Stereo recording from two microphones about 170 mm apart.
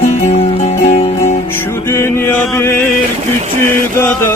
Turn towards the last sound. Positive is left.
turn(degrees=15)  # may be behind; listen again after turning